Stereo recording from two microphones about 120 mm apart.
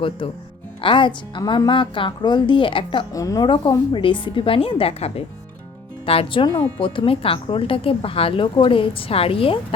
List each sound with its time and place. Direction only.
0.8 s speech: 45° left (ahead or behind)
3.1 s speech: 30° left (ahead or behind); by 9.6 s 50° left (ahead or behind)